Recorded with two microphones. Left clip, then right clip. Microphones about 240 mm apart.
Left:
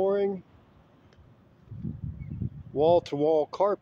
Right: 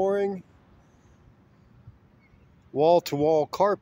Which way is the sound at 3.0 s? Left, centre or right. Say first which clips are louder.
Right 2 dB; right.